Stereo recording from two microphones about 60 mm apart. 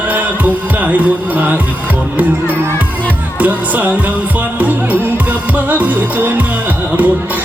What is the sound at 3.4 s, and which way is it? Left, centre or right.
Music, right.